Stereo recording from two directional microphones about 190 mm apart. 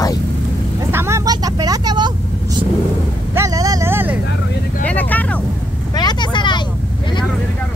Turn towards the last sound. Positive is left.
turn(degrees=25)  # may be behind; listen again after turning